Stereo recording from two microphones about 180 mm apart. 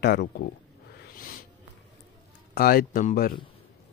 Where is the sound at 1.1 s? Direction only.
50° left (ahead or behind).